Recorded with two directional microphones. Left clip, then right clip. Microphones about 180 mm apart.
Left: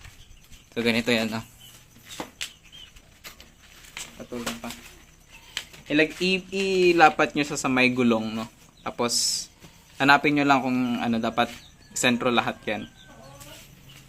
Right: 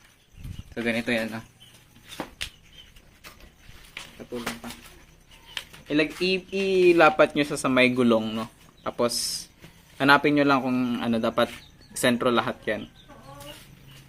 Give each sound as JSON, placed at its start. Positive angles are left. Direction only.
{"t": 0.7, "sound": "speech", "side_deg": 40}
{"t": 5.9, "sound": "a man's voice", "side_deg": 20}
{"t": 6.5, "sound": "a man's voice", "side_deg": 5}